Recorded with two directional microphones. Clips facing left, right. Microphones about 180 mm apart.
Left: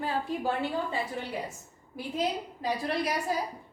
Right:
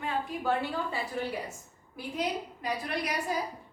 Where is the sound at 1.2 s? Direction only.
20° left (ahead or behind).